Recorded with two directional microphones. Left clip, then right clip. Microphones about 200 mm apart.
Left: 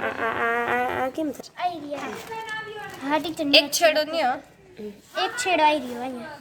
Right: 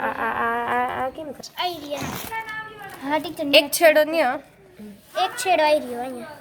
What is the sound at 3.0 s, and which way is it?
A woman's voice, 20° right (ahead or behind).